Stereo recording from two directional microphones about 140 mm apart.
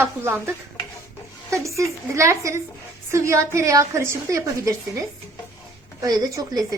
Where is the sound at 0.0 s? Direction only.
15° right (ahead or behind).